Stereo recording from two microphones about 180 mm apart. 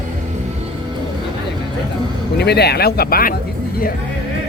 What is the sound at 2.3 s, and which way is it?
Speech, 65° left (ahead or behind).